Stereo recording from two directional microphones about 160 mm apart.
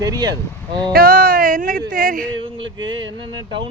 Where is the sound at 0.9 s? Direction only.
65° right (ahead or behind).